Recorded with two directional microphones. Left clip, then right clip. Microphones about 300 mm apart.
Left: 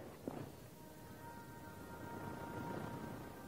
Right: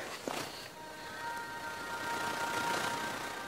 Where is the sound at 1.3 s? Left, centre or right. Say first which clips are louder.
Right 15 dB; centre.